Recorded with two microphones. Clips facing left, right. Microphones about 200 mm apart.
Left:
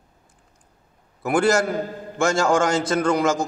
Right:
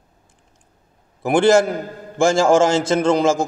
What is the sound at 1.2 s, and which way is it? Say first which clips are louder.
A man's voice: right 5 dB; 25° right (ahead or behind).